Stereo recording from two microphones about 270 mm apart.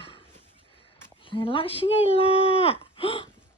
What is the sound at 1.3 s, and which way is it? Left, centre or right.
Speech, centre.